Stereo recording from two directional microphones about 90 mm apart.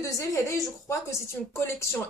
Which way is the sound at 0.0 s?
35° left (ahead or behind).